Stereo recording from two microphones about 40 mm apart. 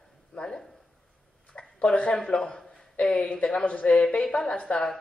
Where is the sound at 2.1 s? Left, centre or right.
Centre.